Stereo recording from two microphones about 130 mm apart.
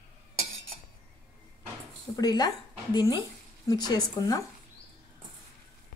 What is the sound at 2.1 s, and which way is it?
Speech, 30° left (ahead or behind).